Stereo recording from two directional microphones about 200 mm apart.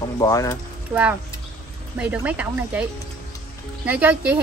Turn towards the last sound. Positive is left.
turn(degrees=-5)  # may be behind; listen again after turning